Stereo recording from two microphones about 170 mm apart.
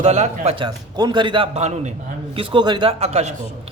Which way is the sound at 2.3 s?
30° right (ahead or behind).